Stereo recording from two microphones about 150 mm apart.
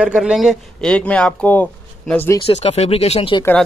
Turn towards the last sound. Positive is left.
turn(degrees=45)  # may be behind; listen again after turning